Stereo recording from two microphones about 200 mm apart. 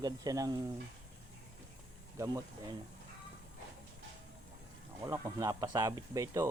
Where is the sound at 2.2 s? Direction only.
15° right (ahead or behind).